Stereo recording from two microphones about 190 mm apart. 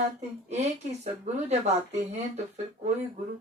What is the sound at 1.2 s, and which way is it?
Speech, 35° right (ahead or behind).